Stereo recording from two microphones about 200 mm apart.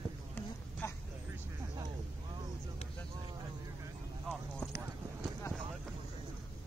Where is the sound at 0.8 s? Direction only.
10° left (ahead or behind).